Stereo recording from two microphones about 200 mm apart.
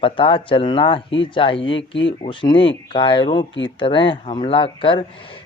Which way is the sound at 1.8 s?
65° left (ahead or behind).